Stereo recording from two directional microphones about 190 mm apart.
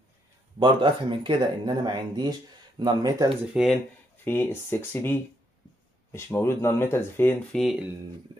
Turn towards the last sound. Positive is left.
turn(degrees=0)  # may be behind; listen again after turning